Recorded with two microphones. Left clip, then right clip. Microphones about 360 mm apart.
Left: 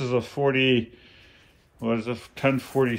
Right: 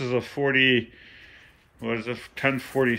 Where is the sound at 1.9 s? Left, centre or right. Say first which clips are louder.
Even; centre.